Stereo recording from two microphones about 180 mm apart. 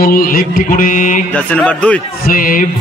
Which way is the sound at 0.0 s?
55° left (ahead or behind).